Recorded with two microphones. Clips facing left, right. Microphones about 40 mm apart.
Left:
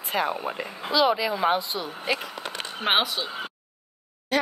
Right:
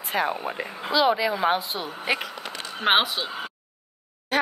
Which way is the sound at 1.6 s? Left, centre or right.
Right.